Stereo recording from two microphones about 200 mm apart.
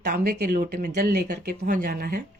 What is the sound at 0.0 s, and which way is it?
Speech, 45° right (ahead or behind).